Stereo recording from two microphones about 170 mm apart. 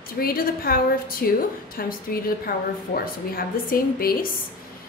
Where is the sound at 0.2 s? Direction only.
60° left (ahead or behind).